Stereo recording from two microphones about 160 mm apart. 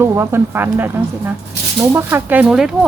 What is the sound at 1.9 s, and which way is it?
Speech, 15° right (ahead or behind).